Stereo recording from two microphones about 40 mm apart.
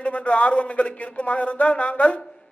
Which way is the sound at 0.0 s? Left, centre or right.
Left.